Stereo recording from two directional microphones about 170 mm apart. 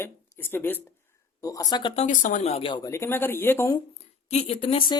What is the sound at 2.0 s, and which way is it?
Speech, 45° left (ahead or behind).